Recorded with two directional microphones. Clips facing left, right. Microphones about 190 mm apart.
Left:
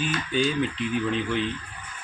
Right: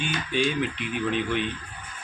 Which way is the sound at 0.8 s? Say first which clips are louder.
Left 1 dB; 30° left (ahead or behind).